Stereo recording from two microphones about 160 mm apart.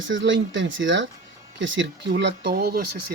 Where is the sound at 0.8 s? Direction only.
90° right.